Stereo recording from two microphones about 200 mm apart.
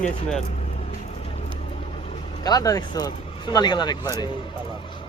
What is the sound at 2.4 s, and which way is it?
Speech, 20° left (ahead or behind).